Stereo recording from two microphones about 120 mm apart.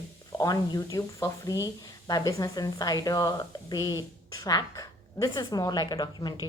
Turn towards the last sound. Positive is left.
turn(degrees=35)  # may be behind; listen again after turning